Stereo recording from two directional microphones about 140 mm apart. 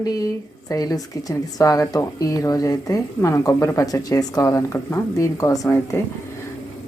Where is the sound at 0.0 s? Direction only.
25° left (ahead or behind).